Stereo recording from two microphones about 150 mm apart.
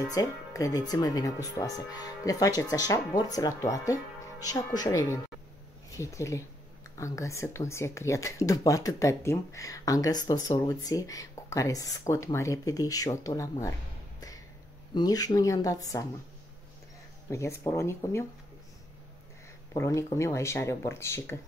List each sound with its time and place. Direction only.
0.1 s speech: 25° left (ahead or behind)
15.0 s speech: 25° left (ahead or behind)
17.3 s speech: 20° left (ahead or behind)
19.7 s speech: 20° left (ahead or behind)